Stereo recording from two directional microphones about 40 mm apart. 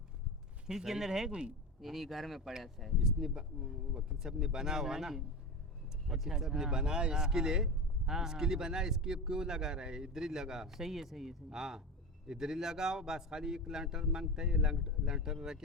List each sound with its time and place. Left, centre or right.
0.7 s speech: centre
1.3 s speech: right
1.8 s speech: centre